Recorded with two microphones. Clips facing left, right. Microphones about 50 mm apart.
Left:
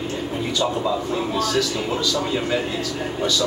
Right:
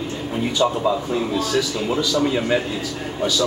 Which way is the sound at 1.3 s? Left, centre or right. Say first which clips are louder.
Even; centre.